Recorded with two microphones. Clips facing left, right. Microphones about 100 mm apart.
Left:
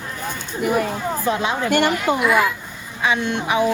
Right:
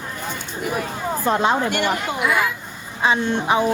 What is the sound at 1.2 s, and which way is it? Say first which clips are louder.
Speech: right 4 dB; 40° right (ahead or behind).